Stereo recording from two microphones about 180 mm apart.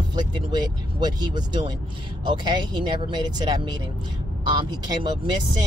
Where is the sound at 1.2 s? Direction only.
25° right (ahead or behind).